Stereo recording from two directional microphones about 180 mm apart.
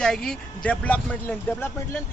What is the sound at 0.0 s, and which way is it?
Speech, 5° left (ahead or behind).